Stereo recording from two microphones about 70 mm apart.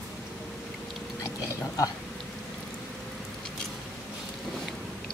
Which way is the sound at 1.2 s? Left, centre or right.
Left.